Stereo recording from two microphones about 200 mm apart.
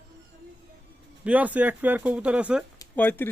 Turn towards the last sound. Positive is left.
turn(degrees=10)  # may be behind; listen again after turning